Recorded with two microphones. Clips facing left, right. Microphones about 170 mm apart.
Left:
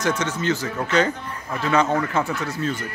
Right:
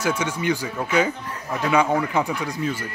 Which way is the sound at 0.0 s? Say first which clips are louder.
Even; 10° right (ahead or behind).